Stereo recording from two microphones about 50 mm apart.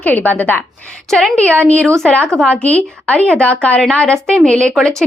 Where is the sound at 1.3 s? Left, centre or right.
Left.